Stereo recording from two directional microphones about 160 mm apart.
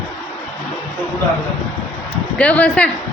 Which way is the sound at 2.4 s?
10° left (ahead or behind).